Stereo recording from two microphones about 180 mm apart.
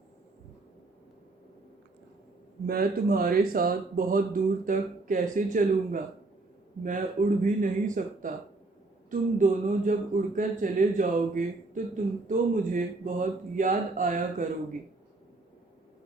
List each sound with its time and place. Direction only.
2.6 s speech: 55° right (ahead or behind)